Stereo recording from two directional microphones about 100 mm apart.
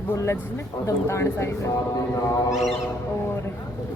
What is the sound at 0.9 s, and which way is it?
Speech, 30° left (ahead or behind).